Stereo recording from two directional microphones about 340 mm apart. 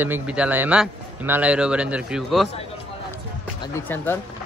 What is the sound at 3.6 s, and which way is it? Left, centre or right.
Speech, centre.